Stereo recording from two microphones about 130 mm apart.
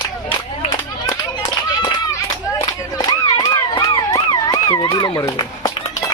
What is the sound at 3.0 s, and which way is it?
Police car, 30° left (ahead or behind).